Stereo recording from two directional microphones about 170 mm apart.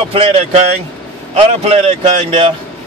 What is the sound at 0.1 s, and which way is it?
A man's voice, 35° right (ahead or behind).